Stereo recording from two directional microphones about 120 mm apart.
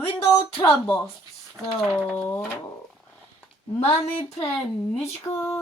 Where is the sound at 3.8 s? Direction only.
55° left (ahead or behind).